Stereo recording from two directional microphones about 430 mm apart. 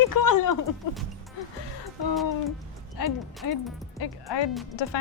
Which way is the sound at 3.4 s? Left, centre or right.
Left.